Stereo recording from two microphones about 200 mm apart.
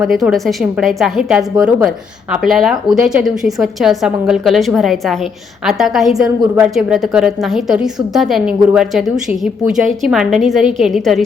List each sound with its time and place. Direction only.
0.0 s a woman's voice: centre (ahead or behind)